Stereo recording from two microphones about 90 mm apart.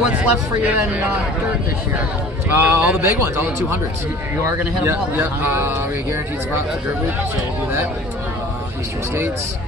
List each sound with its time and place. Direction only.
0.1 s speech: 15° right (ahead or behind)
2.5 s speech: 25° right (ahead or behind)